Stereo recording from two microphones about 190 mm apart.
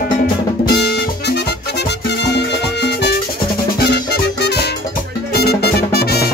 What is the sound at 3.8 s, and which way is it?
Music, 60° left (ahead or behind).